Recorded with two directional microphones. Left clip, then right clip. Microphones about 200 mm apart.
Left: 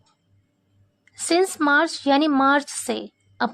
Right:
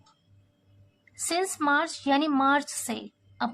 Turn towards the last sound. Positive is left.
turn(degrees=40)  # may be behind; listen again after turning